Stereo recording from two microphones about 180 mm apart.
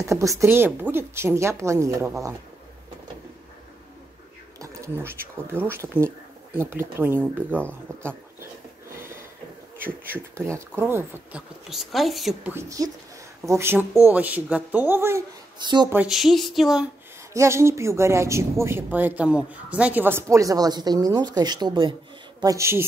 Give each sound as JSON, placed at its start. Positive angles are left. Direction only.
{"t": 0.0, "sound": "speech", "side_deg": -15}
{"t": 4.6, "sound": "a sound", "side_deg": -15}
{"t": 5.5, "sound": "speech", "side_deg": -15}
{"t": 7.4, "sound": "speech", "side_deg": 5}
{"t": 7.9, "sound": "speech", "side_deg": -15}
{"t": 8.9, "sound": "a sound", "side_deg": -15}
{"t": 9.8, "sound": "speech", "side_deg": -10}
{"t": 11.7, "sound": "speech", "side_deg": 0}
{"t": 12.5, "sound": "speech", "side_deg": -20}
{"t": 15.9, "sound": "speech", "side_deg": -5}
{"t": 17.3, "sound": "speech", "side_deg": -15}